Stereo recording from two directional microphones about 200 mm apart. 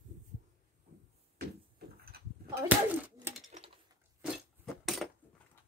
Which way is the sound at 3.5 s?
35° right (ahead or behind).